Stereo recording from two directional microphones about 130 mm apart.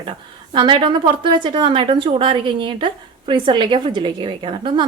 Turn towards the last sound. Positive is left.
turn(degrees=-40)  # may be behind; listen again after turning